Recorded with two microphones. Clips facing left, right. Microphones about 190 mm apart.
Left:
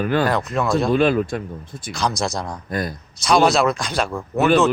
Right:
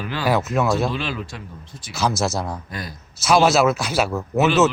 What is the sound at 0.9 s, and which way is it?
Speech, 50° left (ahead or behind).